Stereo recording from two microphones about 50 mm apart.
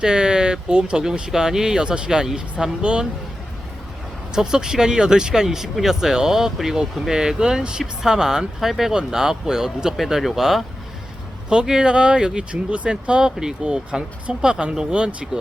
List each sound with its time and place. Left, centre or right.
0.0 s speech: centre
4.4 s speech: centre